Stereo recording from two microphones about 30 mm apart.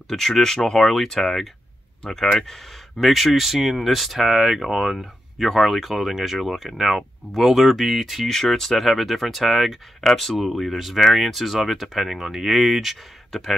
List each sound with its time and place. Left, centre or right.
0.1 s speech: centre
10.0 s speech: centre
10.3 s speech: centre